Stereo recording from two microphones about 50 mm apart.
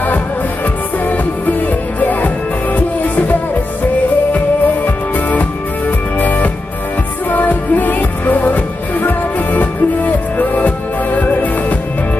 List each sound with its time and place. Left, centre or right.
0.9 s music: left
4.8 s music: left